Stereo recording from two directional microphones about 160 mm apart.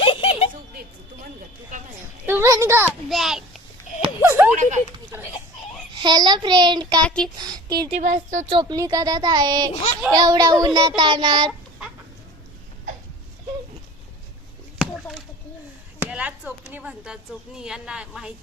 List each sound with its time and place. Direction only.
0.0 s a sound: 35° left (ahead or behind)
2.2 s a child's voice: 15° right (ahead or behind)
3.1 s a woman's voice: centre (ahead or behind)
4.2 s a sound: 15° right (ahead or behind)
5.9 s speech: 30° right (ahead or behind)
7.0 s a woman's voice: 5° left (ahead or behind)
7.3 s speech: 25° right (ahead or behind)
7.9 s speech: 45° right (ahead or behind)
8.5 s speech: 20° right (ahead or behind)
14.8 s chop: centre (ahead or behind)
16.0 s a woman's voice: 10° right (ahead or behind)